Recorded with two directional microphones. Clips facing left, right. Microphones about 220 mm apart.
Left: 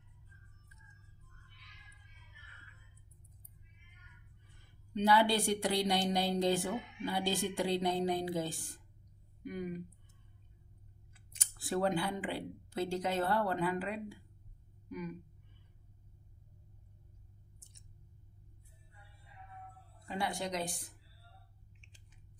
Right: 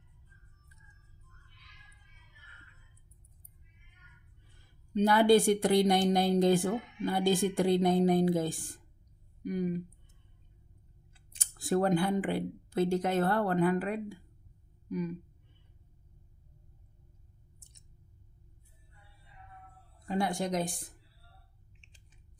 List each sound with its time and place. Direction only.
4.9 s speech: 50° right (ahead or behind)
9.4 s speech: 40° right (ahead or behind)
11.3 s speech: 45° right (ahead or behind)
20.1 s speech: 45° right (ahead or behind)